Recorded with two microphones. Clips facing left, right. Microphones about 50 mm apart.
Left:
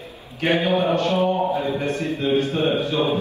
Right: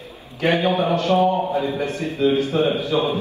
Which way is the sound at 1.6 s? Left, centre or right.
Left.